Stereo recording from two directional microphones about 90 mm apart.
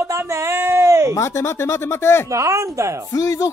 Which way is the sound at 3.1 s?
35° left (ahead or behind).